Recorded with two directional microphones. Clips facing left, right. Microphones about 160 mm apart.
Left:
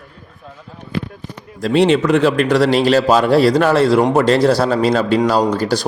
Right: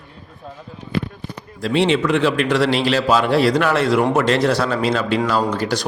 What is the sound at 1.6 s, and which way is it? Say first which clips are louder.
A man's voice: left 4 dB; 40° left (ahead or behind).